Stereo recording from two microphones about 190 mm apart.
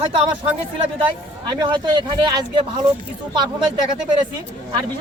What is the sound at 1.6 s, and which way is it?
A man's voice, 25° right (ahead or behind).